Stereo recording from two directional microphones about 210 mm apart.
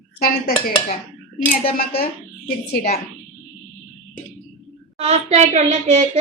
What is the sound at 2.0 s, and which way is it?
Speech, 45° left (ahead or behind).